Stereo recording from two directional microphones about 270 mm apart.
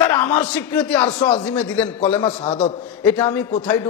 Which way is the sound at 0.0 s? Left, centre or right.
Centre.